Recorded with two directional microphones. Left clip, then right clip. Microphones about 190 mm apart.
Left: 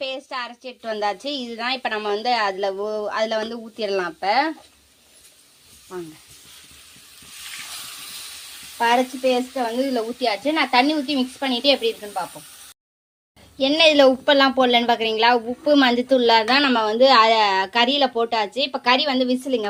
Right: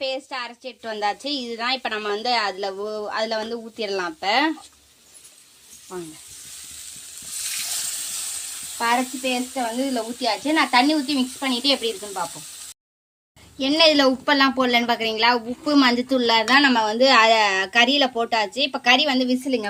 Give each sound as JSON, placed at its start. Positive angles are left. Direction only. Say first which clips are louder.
{"t": 0.0, "sound": "a woman's voice", "louder": "right 1 dB", "side_deg": 5}
{"t": 5.9, "sound": "a woman's voice", "louder": "left 1 dB", "side_deg": 0}
{"t": 8.8, "sound": "a woman's voice", "louder": "left 3 dB", "side_deg": 10}
{"t": 10.2, "sound": "a woman's voice", "louder": "right 1 dB", "side_deg": 5}
{"t": 13.6, "sound": "a woman's voice", "louder": "left 2 dB", "side_deg": 0}